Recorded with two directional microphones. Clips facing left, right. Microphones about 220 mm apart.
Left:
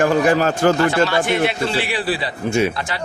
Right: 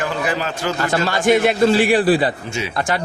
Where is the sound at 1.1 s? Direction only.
45° right (ahead or behind).